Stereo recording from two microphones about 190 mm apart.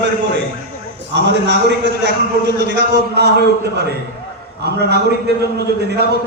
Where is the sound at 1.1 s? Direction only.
60° right (ahead or behind).